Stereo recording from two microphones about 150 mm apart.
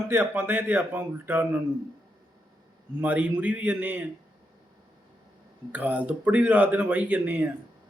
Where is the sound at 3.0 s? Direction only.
10° right (ahead or behind).